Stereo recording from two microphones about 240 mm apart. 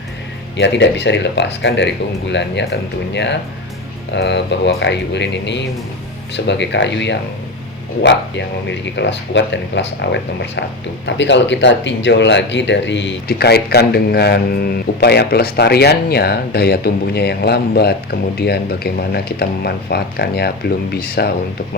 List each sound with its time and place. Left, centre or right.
0.5 s speech: left
4.1 s speech: left